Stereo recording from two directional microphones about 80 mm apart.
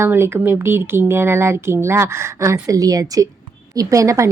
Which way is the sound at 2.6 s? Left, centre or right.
Right.